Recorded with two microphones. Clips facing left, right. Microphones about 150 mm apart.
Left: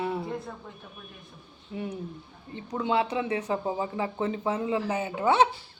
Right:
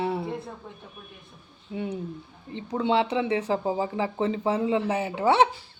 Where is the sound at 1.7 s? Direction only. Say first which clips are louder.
Right 3 dB; 25° right (ahead or behind).